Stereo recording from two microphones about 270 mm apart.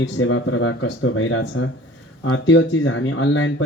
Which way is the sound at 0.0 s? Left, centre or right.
Left.